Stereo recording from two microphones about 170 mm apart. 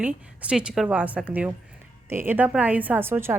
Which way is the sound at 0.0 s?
5° right (ahead or behind).